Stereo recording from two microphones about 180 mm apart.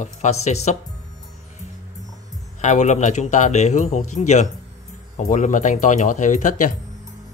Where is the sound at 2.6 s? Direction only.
40° left (ahead or behind).